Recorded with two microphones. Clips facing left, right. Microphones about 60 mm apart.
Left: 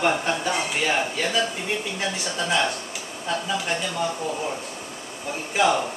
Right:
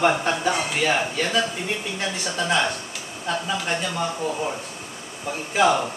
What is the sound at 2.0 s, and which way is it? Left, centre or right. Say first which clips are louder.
A man's voice: right 1 dB; centre.